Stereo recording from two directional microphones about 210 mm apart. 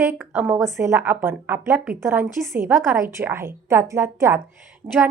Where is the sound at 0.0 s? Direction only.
10° right (ahead or behind).